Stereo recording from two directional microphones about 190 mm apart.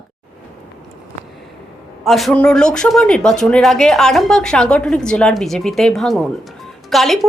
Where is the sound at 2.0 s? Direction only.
Centre (ahead or behind).